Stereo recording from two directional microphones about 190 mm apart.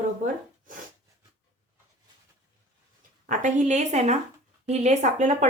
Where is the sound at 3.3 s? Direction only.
40° right (ahead or behind).